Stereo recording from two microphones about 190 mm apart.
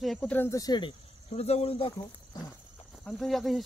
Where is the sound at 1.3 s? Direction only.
30° left (ahead or behind).